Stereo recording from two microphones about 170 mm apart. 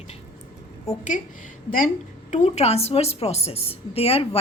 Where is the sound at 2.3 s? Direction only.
45° left (ahead or behind).